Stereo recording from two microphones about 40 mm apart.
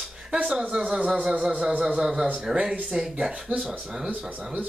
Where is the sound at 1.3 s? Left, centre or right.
Right.